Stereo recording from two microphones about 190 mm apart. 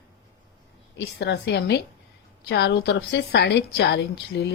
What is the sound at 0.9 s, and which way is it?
A woman's voice, 65° left (ahead or behind).